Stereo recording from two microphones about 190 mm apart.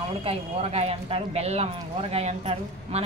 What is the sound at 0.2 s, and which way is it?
Speech, 30° right (ahead or behind).